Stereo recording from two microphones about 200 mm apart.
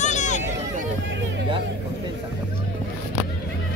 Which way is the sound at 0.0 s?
35° left (ahead or behind).